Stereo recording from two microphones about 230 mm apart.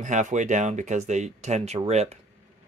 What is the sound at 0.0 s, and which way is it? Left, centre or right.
Speech, right.